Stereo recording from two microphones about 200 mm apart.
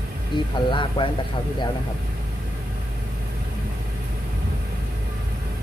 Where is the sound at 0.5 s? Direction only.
25° left (ahead or behind).